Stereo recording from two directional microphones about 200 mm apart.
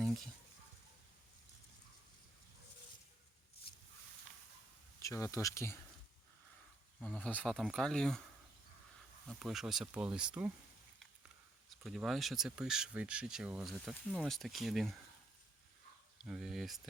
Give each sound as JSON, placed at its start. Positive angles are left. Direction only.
{"t": 4.9, "sound": "speech", "side_deg": 15}
{"t": 7.0, "sound": "speech", "side_deg": 10}
{"t": 9.2, "sound": "speech", "side_deg": 0}
{"t": 11.7, "sound": "speech", "side_deg": 0}
{"t": 16.2, "sound": "speech", "side_deg": 0}